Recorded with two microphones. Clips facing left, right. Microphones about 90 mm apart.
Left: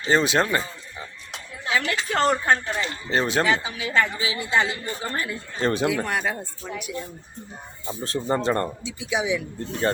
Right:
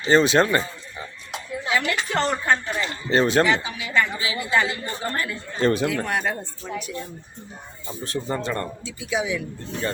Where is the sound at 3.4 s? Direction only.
30° left (ahead or behind).